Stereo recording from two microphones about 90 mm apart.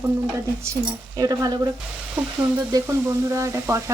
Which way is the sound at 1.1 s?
45° right (ahead or behind).